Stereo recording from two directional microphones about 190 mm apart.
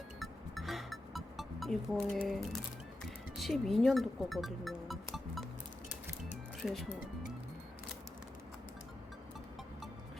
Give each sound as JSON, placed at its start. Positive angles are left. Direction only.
{"t": 0.2, "sound": "music", "side_deg": 0}
{"t": 2.2, "sound": "speech", "side_deg": 0}
{"t": 6.2, "sound": "music", "side_deg": 0}